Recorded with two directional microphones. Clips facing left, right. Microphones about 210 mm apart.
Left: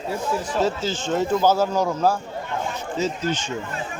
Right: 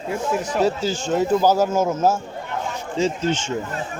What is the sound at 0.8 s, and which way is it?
Speech, 40° right (ahead or behind).